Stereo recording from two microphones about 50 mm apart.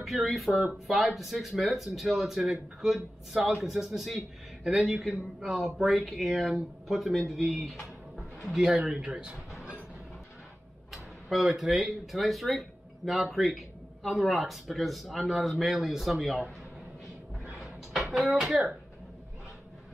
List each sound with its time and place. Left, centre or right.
0.0 s a man's voice: centre
8.5 s a man's voice: centre
10.9 s speech: centre
17.5 s a sound: centre